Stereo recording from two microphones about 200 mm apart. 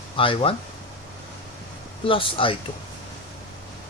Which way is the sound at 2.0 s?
25° left (ahead or behind).